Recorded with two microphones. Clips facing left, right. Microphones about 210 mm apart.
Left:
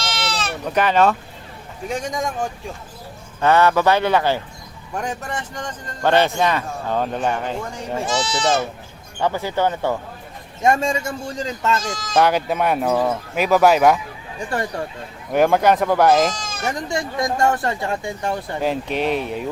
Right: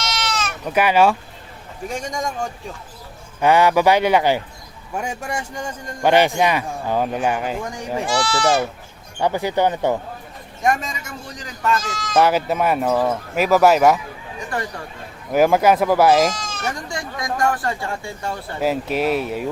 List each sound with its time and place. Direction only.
0.0 s sheep: 30° left (ahead or behind)
0.7 s a man's voice: 10° right (ahead or behind)
1.9 s speech: centre (ahead or behind)
3.4 s a man's voice: 15° right (ahead or behind)
8.0 s speech: 20° left (ahead or behind)
9.2 s a man's voice: 15° right (ahead or behind)
10.6 s speech: 25° left (ahead or behind)
12.1 s speech: 5° right (ahead or behind)
15.3 s a man's voice: 5° right (ahead or behind)
16.9 s speech: 25° left (ahead or behind)
18.6 s speech: 5° right (ahead or behind)